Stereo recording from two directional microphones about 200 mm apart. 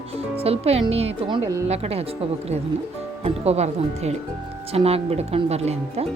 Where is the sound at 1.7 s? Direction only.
30° right (ahead or behind).